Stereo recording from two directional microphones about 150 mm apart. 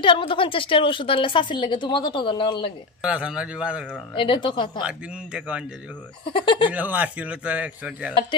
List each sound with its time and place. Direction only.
0.0 s a woman's voice: 35° left (ahead or behind)
3.0 s a man's voice: 5° right (ahead or behind)
4.1 s a woman's voice: 35° left (ahead or behind)
4.8 s a man's voice: 5° right (ahead or behind)
6.2 s a woman's voice: 35° left (ahead or behind)
6.7 s a man's voice: 10° right (ahead or behind)